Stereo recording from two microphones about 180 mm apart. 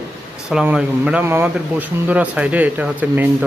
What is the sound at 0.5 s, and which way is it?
Speech, 5° right (ahead or behind).